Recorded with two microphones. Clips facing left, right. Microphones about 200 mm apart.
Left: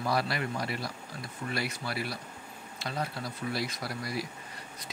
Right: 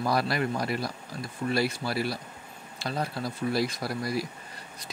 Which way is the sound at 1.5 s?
35° right (ahead or behind).